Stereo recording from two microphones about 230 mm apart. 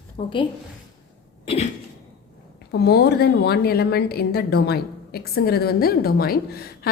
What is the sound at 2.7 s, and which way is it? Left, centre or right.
A woman's voice, left.